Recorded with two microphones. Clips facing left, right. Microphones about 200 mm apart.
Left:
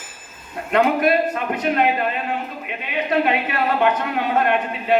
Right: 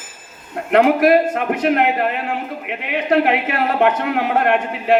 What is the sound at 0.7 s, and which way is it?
A woman's voice, 65° right (ahead or behind).